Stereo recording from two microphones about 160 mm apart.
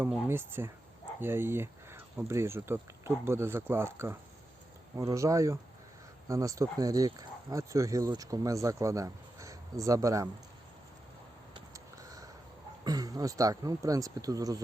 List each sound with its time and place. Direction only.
0.3 s speech: 15° right (ahead or behind)
11.5 s a sound: 20° right (ahead or behind)
12.8 s speech: 25° right (ahead or behind)